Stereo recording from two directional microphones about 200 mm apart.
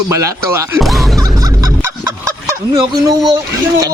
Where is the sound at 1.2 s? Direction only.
15° right (ahead or behind).